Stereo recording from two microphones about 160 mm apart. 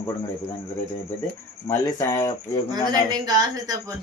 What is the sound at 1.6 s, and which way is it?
Speech, 15° left (ahead or behind).